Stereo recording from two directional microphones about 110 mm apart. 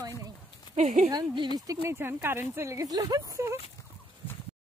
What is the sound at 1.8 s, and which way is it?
Speech, 20° right (ahead or behind).